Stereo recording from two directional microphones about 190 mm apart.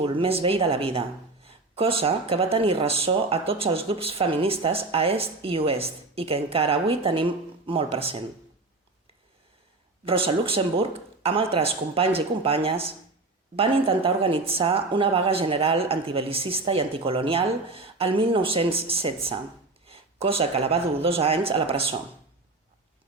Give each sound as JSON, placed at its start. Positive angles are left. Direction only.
{"t": 0.0, "sound": "speech", "side_deg": -30}
{"t": 10.1, "sound": "speech", "side_deg": -30}